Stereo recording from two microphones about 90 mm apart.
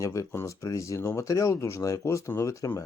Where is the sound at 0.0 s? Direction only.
35° left (ahead or behind).